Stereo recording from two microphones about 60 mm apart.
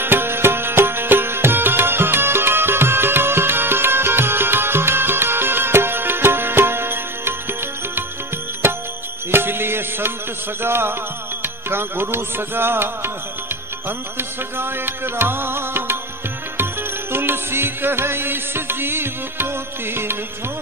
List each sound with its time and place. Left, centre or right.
0.0 s music: right
8.6 s music: right
17.1 s music: right